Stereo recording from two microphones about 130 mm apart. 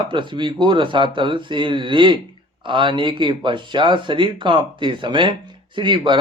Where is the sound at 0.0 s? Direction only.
40° right (ahead or behind).